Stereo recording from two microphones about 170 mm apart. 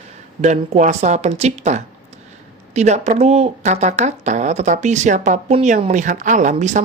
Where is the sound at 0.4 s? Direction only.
45° right (ahead or behind).